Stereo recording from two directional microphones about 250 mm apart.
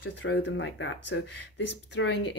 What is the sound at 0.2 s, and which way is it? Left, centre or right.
Speech, left.